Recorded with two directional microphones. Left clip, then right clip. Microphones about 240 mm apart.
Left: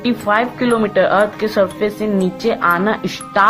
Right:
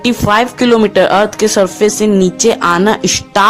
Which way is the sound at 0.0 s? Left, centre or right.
Right.